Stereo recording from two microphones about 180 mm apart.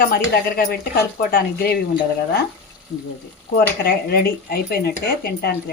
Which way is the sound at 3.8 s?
60° left (ahead or behind).